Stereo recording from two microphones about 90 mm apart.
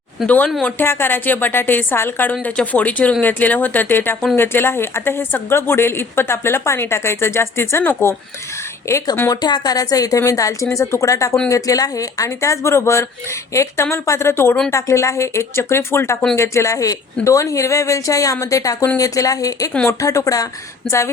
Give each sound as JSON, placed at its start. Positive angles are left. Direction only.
{"t": 0.3, "sound": "a woman's voice", "side_deg": 15}
{"t": 9.3, "sound": "a woman's voice", "side_deg": 50}